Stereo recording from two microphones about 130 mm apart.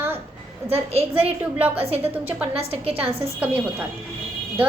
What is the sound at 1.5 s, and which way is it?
Speech, 10° right (ahead or behind).